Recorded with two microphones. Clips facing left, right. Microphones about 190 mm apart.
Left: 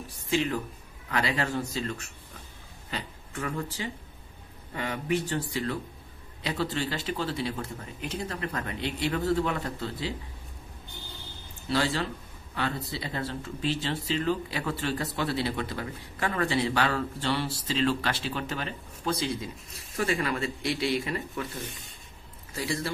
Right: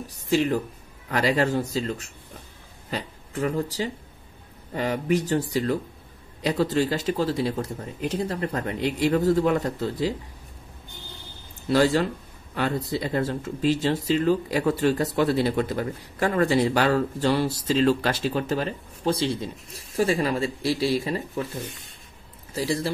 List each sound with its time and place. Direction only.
0.3 s speech: 40° right (ahead or behind)
11.7 s speech: 40° right (ahead or behind)
22.5 s a man's voice: 30° right (ahead or behind)